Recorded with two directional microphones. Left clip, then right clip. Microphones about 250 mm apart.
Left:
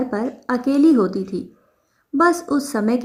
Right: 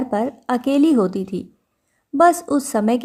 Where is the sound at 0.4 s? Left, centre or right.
Right.